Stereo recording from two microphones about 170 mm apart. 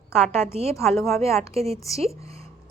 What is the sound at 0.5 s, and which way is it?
Speech, 40° right (ahead or behind).